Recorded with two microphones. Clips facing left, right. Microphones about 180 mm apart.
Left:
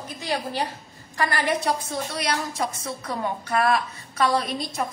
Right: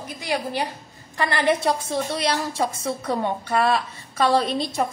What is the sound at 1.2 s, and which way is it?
A woman's voice, 25° right (ahead or behind).